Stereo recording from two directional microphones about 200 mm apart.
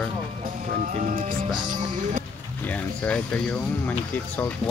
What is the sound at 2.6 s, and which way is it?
Speech, 10° left (ahead or behind).